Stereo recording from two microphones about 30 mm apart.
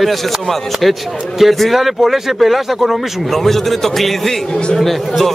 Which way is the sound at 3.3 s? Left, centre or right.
Centre.